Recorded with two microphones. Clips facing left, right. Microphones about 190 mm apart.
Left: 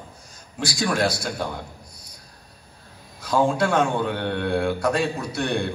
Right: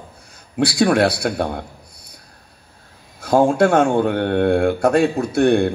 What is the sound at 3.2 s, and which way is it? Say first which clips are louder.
Speech: right 6 dB; 50° right (ahead or behind).